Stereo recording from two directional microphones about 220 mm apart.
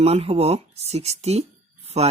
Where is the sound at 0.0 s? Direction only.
25° right (ahead or behind).